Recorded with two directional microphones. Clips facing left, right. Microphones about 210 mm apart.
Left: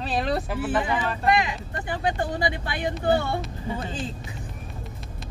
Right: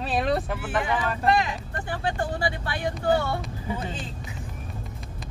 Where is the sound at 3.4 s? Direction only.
Centre (ahead or behind).